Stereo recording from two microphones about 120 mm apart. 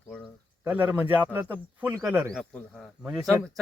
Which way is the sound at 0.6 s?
15° right (ahead or behind).